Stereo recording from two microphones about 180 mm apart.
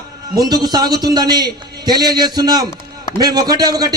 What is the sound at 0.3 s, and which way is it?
A man's voice, 20° right (ahead or behind).